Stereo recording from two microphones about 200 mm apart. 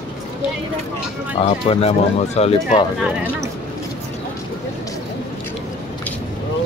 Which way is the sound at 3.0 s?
5° right (ahead or behind).